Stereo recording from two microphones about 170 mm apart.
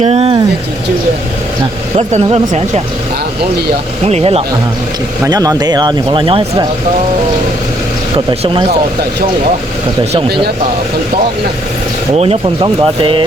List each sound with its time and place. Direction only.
0.0 s speech: 35° right (ahead or behind)
2.0 s speech: 40° right (ahead or behind)
4.0 s speech: 35° right (ahead or behind)
5.2 s speech: 20° right (ahead or behind)
8.1 s speech: 30° right (ahead or behind)
12.1 s speech: 35° right (ahead or behind)